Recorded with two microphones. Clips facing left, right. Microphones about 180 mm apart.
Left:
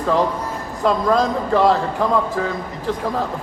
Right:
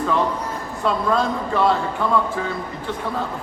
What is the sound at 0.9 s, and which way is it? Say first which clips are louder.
A man's voice: left 3 dB; 40° left (ahead or behind).